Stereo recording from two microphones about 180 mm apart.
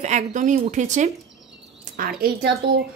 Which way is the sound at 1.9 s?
55° right (ahead or behind).